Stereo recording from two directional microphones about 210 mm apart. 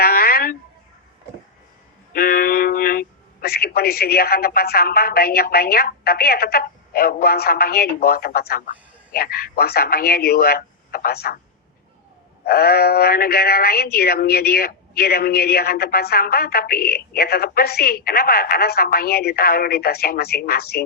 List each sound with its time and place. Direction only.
0.0 s a sound: 45° left (ahead or behind)
2.1 s speech: 45° left (ahead or behind)
12.5 s speech: 45° left (ahead or behind)